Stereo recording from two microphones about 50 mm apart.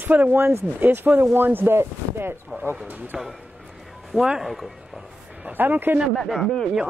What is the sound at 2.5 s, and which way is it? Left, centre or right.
Speech, right.